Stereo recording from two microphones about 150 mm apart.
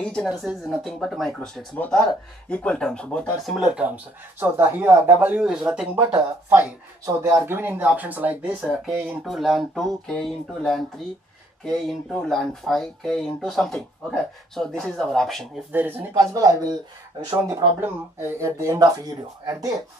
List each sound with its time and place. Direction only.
0.0 s speech: 5° left (ahead or behind)
7.2 s speech: 15° right (ahead or behind); by 15.4 s centre (ahead or behind)
15.7 s speech: 15° right (ahead or behind)